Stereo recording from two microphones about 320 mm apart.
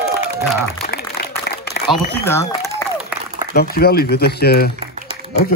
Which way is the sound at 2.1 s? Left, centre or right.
Centre.